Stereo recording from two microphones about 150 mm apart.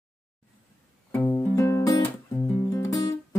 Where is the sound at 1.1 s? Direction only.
15° left (ahead or behind).